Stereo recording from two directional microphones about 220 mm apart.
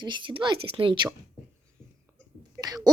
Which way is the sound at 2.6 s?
15° right (ahead or behind).